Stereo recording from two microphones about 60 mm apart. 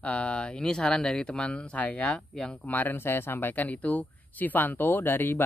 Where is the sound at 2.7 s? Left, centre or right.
Left.